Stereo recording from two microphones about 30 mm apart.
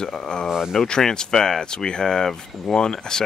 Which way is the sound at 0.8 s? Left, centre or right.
Left.